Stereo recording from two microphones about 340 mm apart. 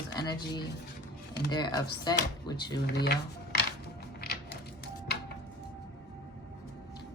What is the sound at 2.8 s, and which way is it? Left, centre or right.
Speech, left.